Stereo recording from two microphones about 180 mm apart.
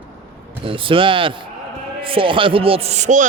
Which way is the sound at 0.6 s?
30° right (ahead or behind).